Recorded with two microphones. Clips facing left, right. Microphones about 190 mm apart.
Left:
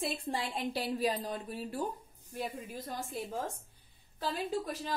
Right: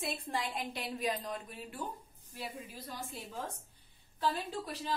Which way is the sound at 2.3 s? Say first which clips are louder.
Left 5 dB; 50° left (ahead or behind).